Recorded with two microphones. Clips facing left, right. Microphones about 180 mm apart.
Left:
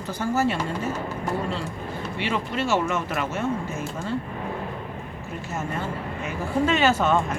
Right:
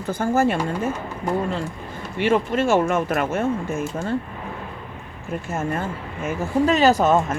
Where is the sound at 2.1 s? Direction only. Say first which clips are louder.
Right 8 dB; 50° right (ahead or behind).